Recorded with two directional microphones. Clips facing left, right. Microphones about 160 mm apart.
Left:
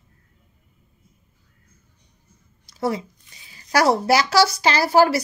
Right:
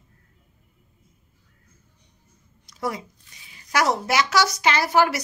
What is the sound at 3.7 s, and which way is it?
A woman's voice, 35° left (ahead or behind).